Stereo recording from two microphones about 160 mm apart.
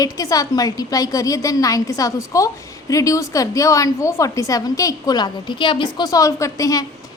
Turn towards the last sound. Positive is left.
turn(degrees=20)  # may be behind; listen again after turning